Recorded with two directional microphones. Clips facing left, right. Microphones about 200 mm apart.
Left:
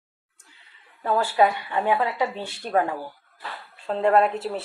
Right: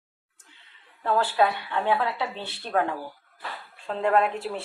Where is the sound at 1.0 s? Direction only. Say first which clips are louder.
Left 2 dB; 10° left (ahead or behind).